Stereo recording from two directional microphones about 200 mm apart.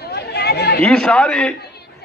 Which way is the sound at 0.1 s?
55° left (ahead or behind).